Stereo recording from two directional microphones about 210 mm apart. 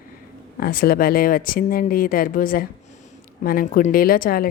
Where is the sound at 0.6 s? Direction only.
45° left (ahead or behind).